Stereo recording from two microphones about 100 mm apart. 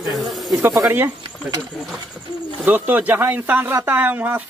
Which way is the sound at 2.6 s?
15° right (ahead or behind).